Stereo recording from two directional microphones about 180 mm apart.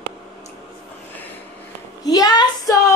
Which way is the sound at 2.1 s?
20° left (ahead or behind).